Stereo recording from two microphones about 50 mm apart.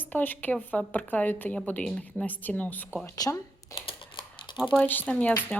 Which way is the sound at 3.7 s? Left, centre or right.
Left.